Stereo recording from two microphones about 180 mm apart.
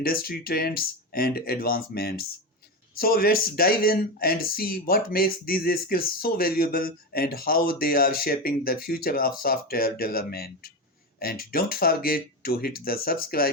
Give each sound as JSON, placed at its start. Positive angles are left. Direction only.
{"t": 0.0, "sound": "speech", "side_deg": 55}